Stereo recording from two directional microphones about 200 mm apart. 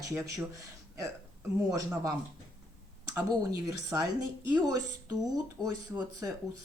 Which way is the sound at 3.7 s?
15° right (ahead or behind).